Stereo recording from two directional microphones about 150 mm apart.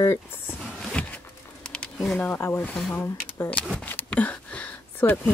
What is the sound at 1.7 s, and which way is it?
Speech, 5° left (ahead or behind).